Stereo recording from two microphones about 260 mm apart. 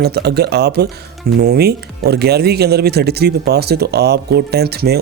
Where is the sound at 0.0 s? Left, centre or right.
Right.